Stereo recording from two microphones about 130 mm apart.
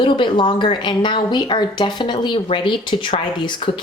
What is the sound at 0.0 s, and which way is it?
Speech, 40° left (ahead or behind).